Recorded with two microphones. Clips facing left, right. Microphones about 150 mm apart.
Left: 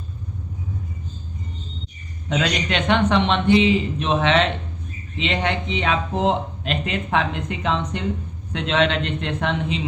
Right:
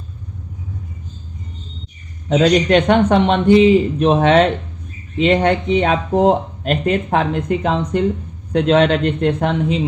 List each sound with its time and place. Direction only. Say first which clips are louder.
2.3 s speech: right 10 dB; 40° right (ahead or behind)